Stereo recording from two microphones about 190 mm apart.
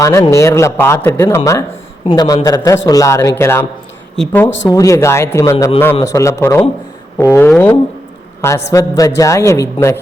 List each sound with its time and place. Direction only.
0.0 s speech: 15° left (ahead or behind)